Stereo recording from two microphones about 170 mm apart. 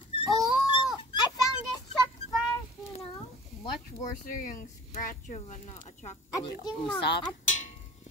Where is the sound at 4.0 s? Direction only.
50° left (ahead or behind).